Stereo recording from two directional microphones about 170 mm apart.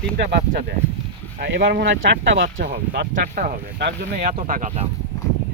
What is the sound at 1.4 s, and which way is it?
Speech, 70° right (ahead or behind).